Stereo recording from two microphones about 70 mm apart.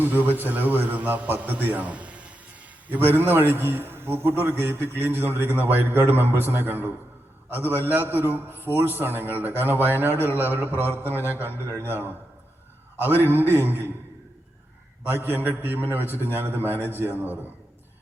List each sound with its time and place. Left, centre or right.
0.0 s a man's voice: right
3.2 s a man's voice: right
13.4 s a man's voice: right
15.0 s a man's voice: right